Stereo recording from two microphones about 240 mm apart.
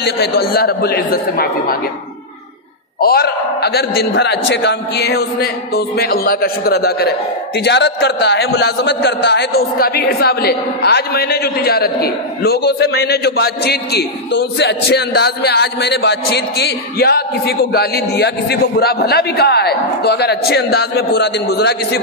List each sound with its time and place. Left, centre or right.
0.0 s a man's voice: left
3.0 s a man's voice: left